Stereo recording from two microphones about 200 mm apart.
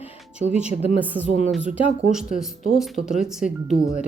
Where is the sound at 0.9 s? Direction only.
10° right (ahead or behind).